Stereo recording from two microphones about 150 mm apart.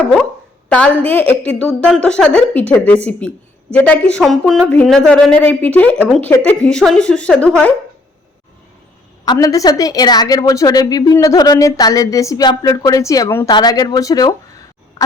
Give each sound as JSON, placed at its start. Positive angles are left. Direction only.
{"t": 0.0, "sound": "speech", "side_deg": 0}
{"t": 9.2, "sound": "a woman's voice", "side_deg": 25}